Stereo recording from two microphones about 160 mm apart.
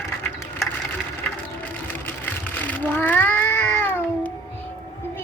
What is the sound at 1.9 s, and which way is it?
Cat, 10° left (ahead or behind).